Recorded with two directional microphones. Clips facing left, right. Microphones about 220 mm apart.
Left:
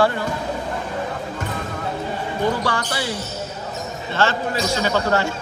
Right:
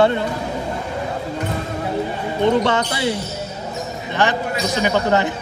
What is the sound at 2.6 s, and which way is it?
Speech, 20° right (ahead or behind).